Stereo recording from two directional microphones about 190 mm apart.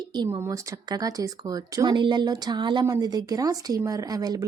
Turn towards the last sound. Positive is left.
turn(degrees=-20)  # may be behind; listen again after turning